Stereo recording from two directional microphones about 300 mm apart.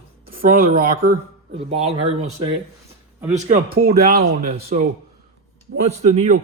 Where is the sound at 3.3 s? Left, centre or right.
Right.